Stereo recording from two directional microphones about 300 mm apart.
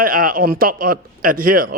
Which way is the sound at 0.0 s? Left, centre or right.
Right.